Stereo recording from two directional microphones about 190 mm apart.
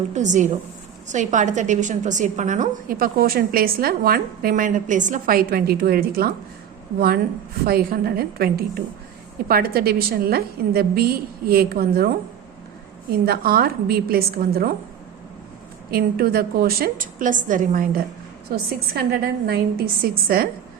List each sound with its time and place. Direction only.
0.1 s a woman's voice: 40° right (ahead or behind)
7.6 s a woman's voice: 55° right (ahead or behind)
13.2 s a woman's voice: 55° right (ahead or behind)
15.9 s a woman's voice: 50° right (ahead or behind)